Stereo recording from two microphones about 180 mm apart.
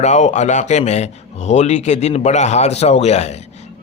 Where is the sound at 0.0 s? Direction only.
40° left (ahead or behind).